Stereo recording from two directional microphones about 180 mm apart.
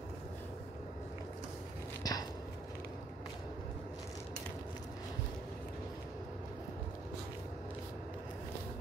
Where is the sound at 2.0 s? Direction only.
20° left (ahead or behind).